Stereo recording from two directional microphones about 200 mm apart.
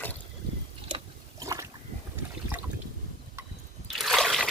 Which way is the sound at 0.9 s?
25° right (ahead or behind).